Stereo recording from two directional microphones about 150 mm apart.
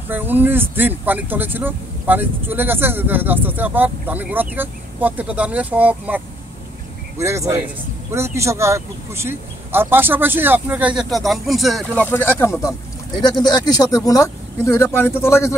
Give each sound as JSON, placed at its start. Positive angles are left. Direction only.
{"t": 0.1, "sound": "speech", "side_deg": -15}
{"t": 13.2, "sound": "speech", "side_deg": 30}